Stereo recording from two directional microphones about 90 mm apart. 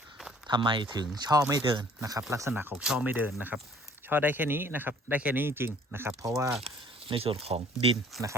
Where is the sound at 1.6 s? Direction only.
65° right (ahead or behind).